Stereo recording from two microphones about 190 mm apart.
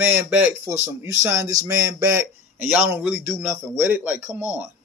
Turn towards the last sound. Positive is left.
turn(degrees=-10)  # may be behind; listen again after turning